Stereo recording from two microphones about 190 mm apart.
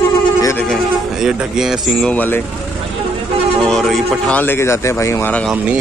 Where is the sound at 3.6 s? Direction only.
Centre (ahead or behind).